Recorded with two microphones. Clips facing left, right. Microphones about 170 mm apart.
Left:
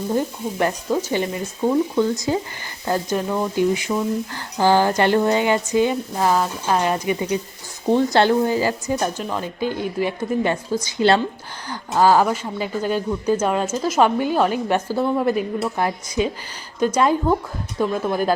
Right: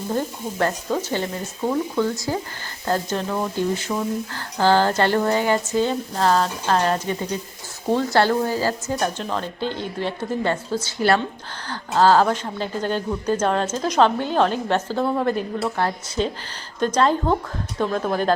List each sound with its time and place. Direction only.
0.1 s speech: 10° left (ahead or behind)